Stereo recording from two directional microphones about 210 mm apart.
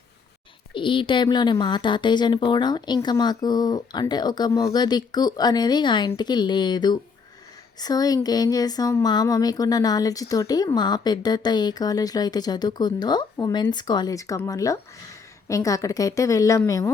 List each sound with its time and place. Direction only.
0.7 s speech: 25° left (ahead or behind)